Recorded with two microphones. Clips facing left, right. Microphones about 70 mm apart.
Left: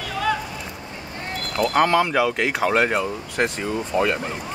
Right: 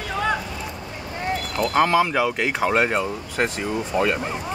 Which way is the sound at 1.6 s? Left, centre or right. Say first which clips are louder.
Left 1 dB; centre.